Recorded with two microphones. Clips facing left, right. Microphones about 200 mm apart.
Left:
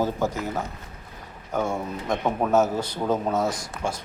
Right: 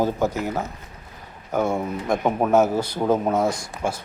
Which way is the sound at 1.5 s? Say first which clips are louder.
Right 4 dB; 10° right (ahead or behind).